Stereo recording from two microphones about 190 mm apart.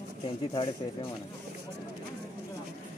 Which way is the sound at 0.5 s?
30° left (ahead or behind).